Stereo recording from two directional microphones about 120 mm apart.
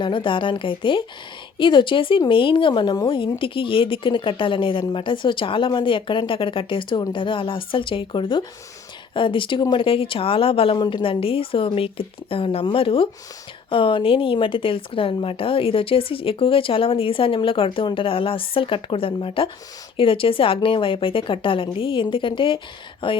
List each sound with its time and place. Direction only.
0.0 s speech: 45° left (ahead or behind)
3.1 s speech: 45° left (ahead or behind)